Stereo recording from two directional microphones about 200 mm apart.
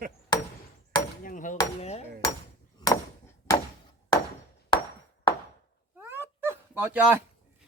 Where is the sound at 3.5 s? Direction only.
15° left (ahead or behind).